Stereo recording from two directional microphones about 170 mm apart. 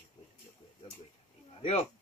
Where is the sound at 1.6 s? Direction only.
35° left (ahead or behind).